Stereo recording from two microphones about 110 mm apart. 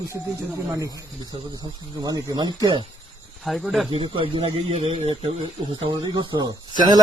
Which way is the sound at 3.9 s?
50° right (ahead or behind).